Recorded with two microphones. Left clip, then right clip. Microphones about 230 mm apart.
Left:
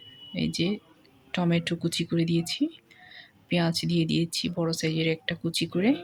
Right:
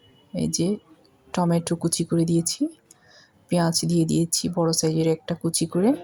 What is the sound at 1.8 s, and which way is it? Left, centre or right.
Speech, centre.